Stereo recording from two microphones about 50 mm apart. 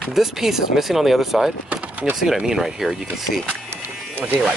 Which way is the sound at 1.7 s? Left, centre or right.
Right.